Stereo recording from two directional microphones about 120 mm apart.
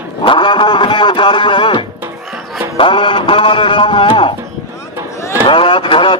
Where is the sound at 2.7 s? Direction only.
45° left (ahead or behind).